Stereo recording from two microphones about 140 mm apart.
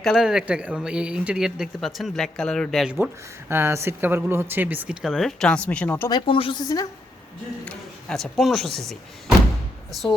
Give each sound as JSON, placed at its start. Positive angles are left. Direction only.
{"t": 0.0, "sound": "speech", "side_deg": 0}
{"t": 3.5, "sound": "speech", "side_deg": -20}
{"t": 6.1, "sound": "a woman's voice", "side_deg": 35}
{"t": 7.6, "sound": "speech", "side_deg": 5}